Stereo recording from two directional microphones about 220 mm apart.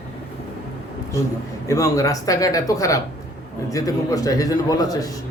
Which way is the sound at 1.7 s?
15° left (ahead or behind).